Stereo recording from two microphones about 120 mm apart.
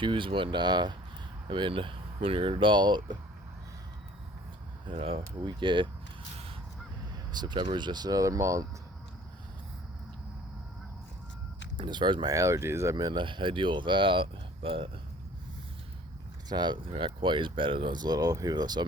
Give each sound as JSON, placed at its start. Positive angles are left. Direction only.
{"t": 0.0, "sound": "speech", "side_deg": -45}
{"t": 4.9, "sound": "speech", "side_deg": -50}
{"t": 7.3, "sound": "speech", "side_deg": -40}
{"t": 11.8, "sound": "speech", "side_deg": -40}
{"t": 12.3, "sound": "speech", "side_deg": -25}
{"t": 16.5, "sound": "speech", "side_deg": -40}